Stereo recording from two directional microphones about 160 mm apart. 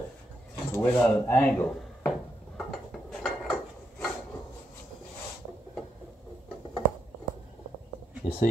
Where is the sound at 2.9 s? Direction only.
Centre (ahead or behind).